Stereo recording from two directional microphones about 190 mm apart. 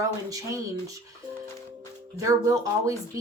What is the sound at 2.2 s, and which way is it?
Speech, 15° right (ahead or behind).